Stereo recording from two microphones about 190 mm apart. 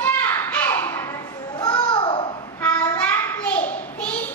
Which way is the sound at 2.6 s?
10° left (ahead or behind).